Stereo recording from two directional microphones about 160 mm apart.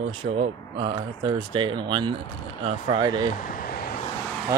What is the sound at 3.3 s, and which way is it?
Vehicle, 60° left (ahead or behind).